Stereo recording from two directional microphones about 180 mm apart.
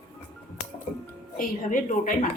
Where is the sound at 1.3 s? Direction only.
50° left (ahead or behind).